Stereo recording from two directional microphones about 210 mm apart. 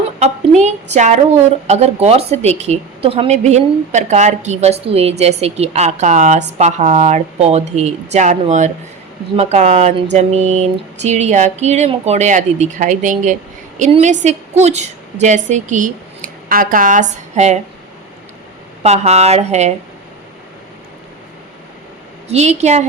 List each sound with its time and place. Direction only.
0.2 s a woman's voice: 35° right (ahead or behind)
18.8 s speech: 30° right (ahead or behind)
22.3 s speech: 30° right (ahead or behind)